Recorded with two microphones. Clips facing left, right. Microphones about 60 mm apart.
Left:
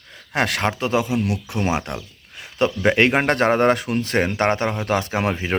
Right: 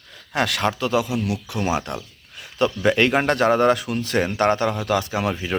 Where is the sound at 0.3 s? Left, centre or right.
Left.